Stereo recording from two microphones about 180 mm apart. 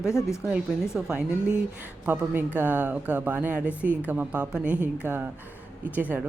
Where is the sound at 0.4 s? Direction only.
5° right (ahead or behind).